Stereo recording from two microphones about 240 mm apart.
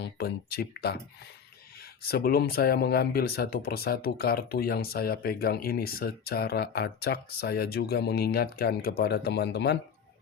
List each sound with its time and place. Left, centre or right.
0.0 s speech: left